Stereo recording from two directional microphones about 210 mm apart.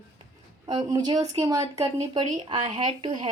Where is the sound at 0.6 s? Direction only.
20° right (ahead or behind).